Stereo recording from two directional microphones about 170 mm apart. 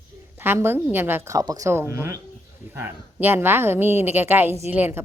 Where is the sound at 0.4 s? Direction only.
15° right (ahead or behind).